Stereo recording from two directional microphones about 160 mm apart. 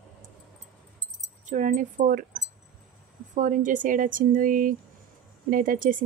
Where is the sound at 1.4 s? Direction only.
50° right (ahead or behind).